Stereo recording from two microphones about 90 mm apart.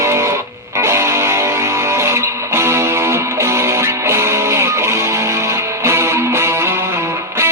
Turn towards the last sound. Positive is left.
turn(degrees=-30)  # may be behind; listen again after turning